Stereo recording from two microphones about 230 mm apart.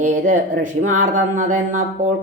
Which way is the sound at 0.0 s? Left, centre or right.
Right.